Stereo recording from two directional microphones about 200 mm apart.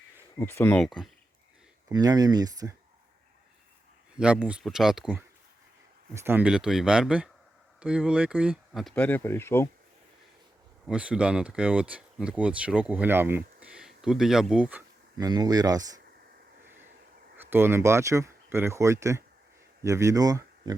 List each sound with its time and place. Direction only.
0.3 s speech: 10° left (ahead or behind)
1.9 s speech: 20° right (ahead or behind)
4.2 s speech: 5° right (ahead or behind); by 9.6 s 10° left (ahead or behind)
10.8 s speech: 5° right (ahead or behind)
15.2 s speech: 20° right (ahead or behind)
17.3 s speech: 10° right (ahead or behind)